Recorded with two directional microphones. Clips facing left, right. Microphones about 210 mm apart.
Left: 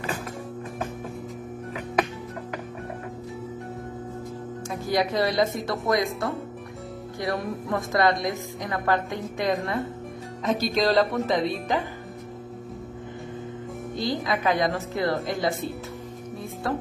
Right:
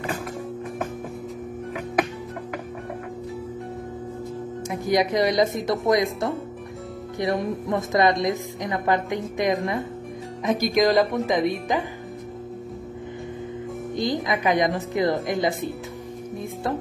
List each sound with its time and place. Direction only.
4.6 s a woman's voice: 20° right (ahead or behind)
13.9 s a woman's voice: 15° right (ahead or behind)